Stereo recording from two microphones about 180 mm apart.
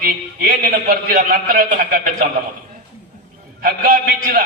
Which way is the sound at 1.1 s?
55° right (ahead or behind).